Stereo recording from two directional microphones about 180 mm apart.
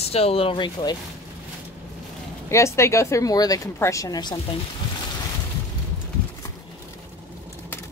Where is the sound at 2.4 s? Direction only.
15° left (ahead or behind).